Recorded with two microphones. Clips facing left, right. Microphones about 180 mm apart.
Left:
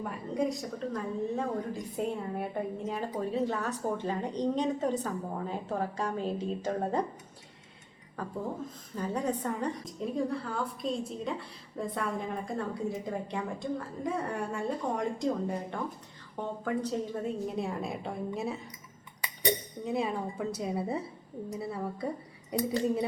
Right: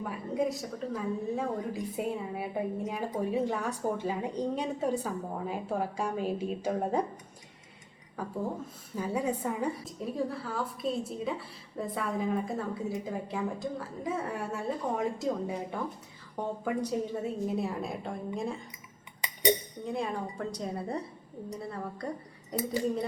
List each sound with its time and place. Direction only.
0.0 s a woman's voice: centre (ahead or behind)
8.2 s a woman's voice: 10° right (ahead or behind)
19.2 s a sound: 20° right (ahead or behind)
19.8 s a woman's voice: 5° left (ahead or behind)